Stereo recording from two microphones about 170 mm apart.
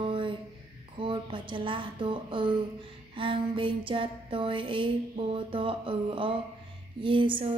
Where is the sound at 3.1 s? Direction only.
30° right (ahead or behind).